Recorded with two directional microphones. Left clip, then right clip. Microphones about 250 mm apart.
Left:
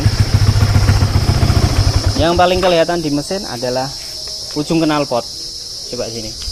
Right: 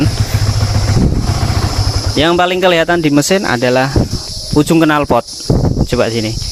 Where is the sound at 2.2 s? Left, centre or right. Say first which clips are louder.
Right 2 dB; right.